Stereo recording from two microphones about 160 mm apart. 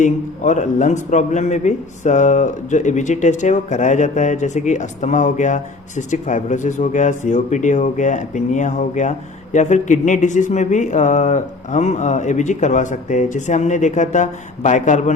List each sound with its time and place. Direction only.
0.0 s speech: 50° left (ahead or behind)